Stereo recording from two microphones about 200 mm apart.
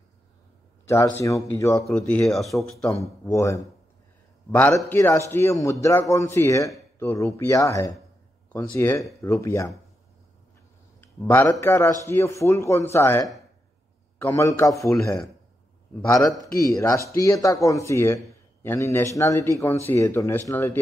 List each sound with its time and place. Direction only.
0.8 s speech: 15° left (ahead or behind)
1.9 s speech: 5° left (ahead or behind)
2.9 s speech: 15° left (ahead or behind)
11.0 s a man's voice: 10° left (ahead or behind)
16.1 s a man's voice: 15° left (ahead or behind)